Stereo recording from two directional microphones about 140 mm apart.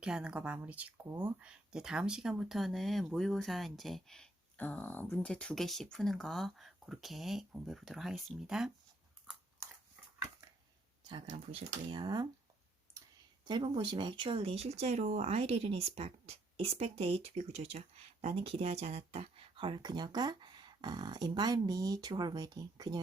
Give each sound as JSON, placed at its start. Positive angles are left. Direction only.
{"t": 0.0, "sound": "speech", "side_deg": -5}
{"t": 11.5, "sound": "speech", "side_deg": -35}
{"t": 13.4, "sound": "speech", "side_deg": -30}